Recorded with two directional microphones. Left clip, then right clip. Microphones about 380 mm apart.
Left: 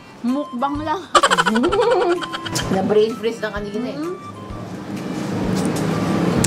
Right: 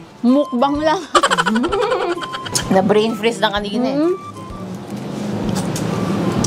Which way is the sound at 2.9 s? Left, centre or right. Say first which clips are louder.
Right 2 dB; right.